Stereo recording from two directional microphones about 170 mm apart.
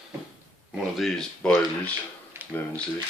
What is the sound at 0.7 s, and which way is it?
Speech, centre (ahead or behind).